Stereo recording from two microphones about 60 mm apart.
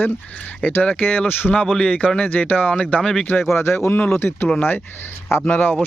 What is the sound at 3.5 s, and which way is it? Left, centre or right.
Speech, left.